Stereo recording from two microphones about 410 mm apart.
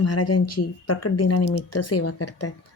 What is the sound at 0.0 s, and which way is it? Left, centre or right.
Speech, left.